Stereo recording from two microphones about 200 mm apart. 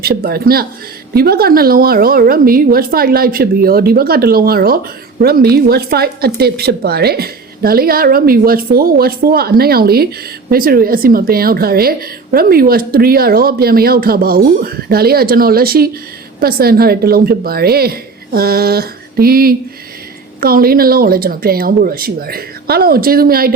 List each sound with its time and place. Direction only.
0.0 s a woman's voice: 50° right (ahead or behind)